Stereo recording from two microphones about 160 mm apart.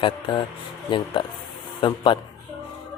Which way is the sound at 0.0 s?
30° left (ahead or behind).